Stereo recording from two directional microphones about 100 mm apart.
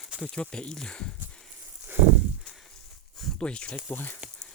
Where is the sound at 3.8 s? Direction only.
20° left (ahead or behind).